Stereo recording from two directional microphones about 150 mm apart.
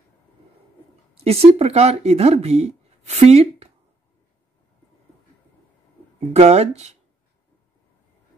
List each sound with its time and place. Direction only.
1.1 s speech: 45° right (ahead or behind)
6.3 s speech: 45° right (ahead or behind)